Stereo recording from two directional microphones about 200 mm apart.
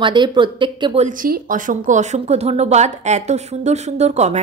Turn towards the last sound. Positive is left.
turn(degrees=-35)  # may be behind; listen again after turning